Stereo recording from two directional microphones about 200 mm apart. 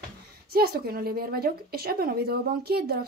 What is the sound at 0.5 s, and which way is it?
A woman's voice, 50° right (ahead or behind).